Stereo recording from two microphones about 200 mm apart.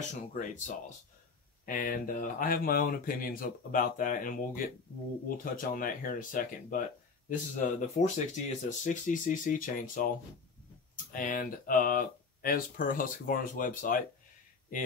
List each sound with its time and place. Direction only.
0.3 s speech: 40° left (ahead or behind)